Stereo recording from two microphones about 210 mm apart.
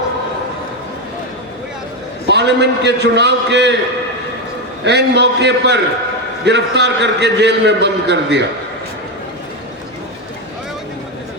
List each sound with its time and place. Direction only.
2.2 s a man's voice: 55° right (ahead or behind)
4.9 s a man's voice: 55° right (ahead or behind)